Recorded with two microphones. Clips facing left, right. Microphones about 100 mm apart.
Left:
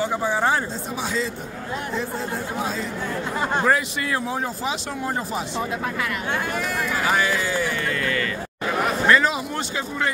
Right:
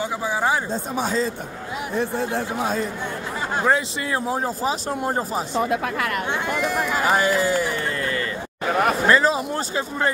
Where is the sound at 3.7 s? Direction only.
25° right (ahead or behind).